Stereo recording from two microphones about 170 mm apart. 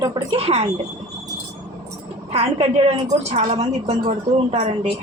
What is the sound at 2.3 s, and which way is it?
A woman's voice, 35° right (ahead or behind).